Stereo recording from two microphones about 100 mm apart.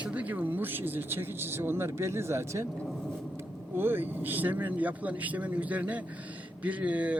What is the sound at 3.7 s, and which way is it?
A man's voice, 20° right (ahead or behind).